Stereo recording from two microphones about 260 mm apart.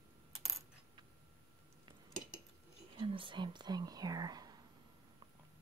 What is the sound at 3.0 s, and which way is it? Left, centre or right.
Speech, centre.